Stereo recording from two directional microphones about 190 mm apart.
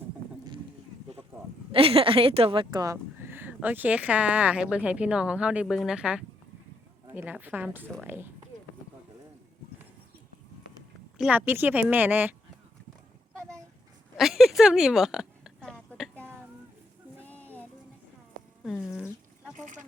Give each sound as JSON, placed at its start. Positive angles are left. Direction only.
{"t": 1.7, "sound": "speech", "side_deg": -30}
{"t": 11.2, "sound": "speech", "side_deg": -10}
{"t": 14.2, "sound": "a sound", "side_deg": 0}
{"t": 17.2, "sound": "a sound", "side_deg": 10}
{"t": 18.6, "sound": "speech", "side_deg": 0}
{"t": 19.5, "sound": "speech", "side_deg": -40}